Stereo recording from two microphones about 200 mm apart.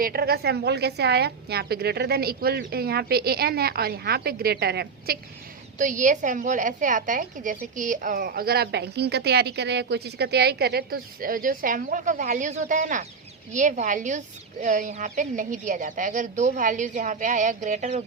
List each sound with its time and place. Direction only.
0.0 s a woman's voice: 50° right (ahead or behind)
5.8 s a woman's voice: 40° right (ahead or behind)